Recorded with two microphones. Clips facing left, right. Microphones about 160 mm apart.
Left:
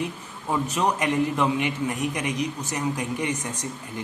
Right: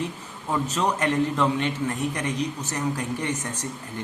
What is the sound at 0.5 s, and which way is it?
Speech, 15° left (ahead or behind).